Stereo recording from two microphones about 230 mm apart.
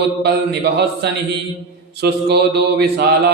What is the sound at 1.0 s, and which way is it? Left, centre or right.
A man's voice, right.